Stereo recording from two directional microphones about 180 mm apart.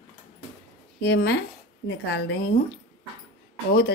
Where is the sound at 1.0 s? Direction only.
65° left (ahead or behind).